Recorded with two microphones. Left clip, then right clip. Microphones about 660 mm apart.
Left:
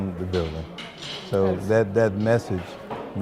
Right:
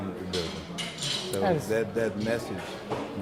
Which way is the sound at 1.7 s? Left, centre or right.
Left.